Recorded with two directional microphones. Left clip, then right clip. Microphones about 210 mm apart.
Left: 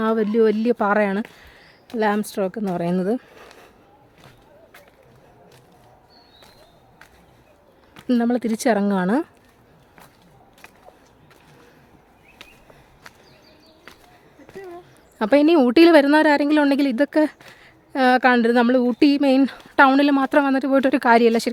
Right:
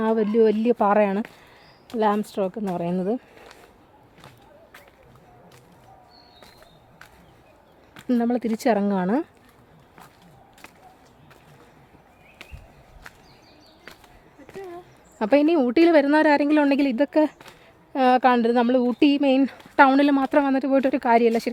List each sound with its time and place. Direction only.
0.0 s a woman's voice: 10° left (ahead or behind)
7.9 s a woman's voice: 10° left (ahead or behind)
15.2 s a woman's voice: 15° left (ahead or behind)